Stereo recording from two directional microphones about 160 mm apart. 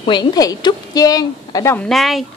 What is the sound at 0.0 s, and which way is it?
A woman's voice, 30° left (ahead or behind).